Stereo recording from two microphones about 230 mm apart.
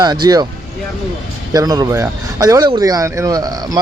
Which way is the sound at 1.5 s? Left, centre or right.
Centre.